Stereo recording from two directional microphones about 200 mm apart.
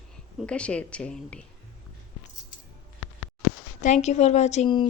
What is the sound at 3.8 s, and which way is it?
Speech, 35° left (ahead or behind).